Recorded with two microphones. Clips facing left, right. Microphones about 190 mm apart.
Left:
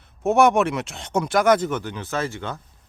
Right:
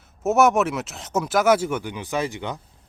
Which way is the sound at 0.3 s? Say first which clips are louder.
Left 1 dB; centre (ahead or behind).